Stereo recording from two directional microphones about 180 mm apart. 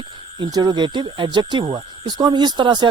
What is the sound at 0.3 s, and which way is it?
Speech, 25° right (ahead or behind).